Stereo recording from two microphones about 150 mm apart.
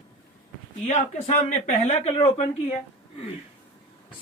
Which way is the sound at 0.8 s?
50° left (ahead or behind).